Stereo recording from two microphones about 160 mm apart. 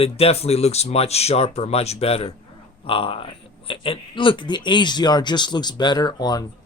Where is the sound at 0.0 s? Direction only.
40° left (ahead or behind).